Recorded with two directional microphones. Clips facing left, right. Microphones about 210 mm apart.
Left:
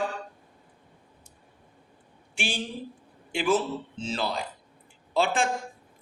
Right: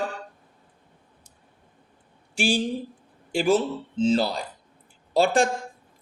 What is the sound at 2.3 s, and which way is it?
Speech, 35° right (ahead or behind).